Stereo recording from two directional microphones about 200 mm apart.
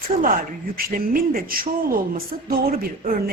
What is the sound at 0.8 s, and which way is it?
A woman's voice, 45° right (ahead or behind).